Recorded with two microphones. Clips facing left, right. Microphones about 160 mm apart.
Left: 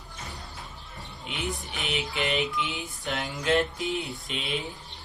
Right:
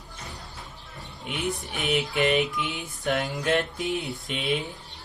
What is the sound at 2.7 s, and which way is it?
Speech, centre (ahead or behind).